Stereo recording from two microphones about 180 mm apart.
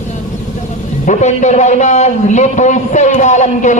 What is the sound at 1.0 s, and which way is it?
A man's voice, 40° left (ahead or behind).